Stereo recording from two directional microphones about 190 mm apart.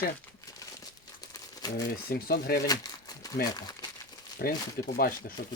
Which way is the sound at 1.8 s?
50° left (ahead or behind).